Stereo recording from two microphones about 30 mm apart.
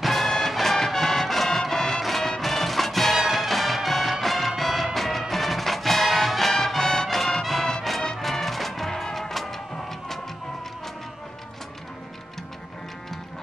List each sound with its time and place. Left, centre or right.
0.0 s music: centre
3.2 s music: centre
3.4 s music: centre
8.9 s music: centre